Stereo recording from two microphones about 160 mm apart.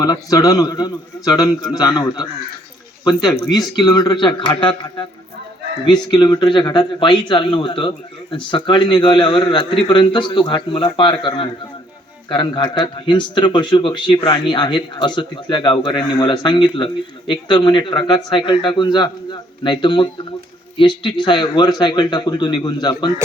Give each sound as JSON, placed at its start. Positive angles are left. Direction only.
{"t": 0.0, "sound": "speech", "side_deg": 25}
{"t": 3.5, "sound": "speech", "side_deg": 25}
{"t": 6.1, "sound": "speech", "side_deg": 25}